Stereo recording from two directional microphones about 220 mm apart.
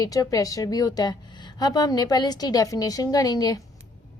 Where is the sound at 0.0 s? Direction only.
15° left (ahead or behind).